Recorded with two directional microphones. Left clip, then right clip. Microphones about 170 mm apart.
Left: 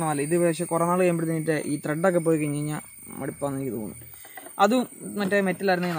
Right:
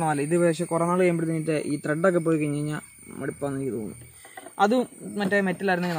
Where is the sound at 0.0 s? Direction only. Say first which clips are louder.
Right 1 dB; 5° right (ahead or behind).